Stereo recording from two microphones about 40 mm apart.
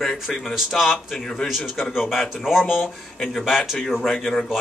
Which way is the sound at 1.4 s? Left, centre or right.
Centre.